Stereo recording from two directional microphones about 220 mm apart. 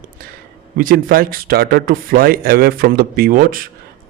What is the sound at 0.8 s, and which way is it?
Speech, 40° right (ahead or behind).